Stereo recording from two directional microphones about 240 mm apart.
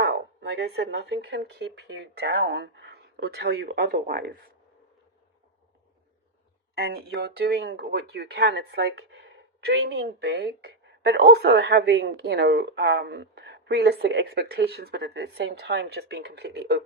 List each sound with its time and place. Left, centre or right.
0.0 s speech: right
6.7 s speech: right